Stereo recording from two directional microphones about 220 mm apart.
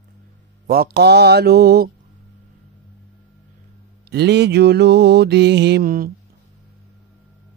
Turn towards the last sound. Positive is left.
turn(degrees=-40)  # may be behind; listen again after turning